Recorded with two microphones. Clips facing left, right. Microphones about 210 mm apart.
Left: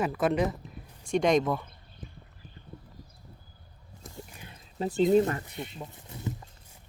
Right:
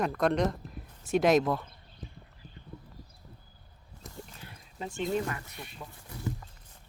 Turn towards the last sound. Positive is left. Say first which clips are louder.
# left 6 dB
turn(degrees=20)  # may be behind; listen again after turning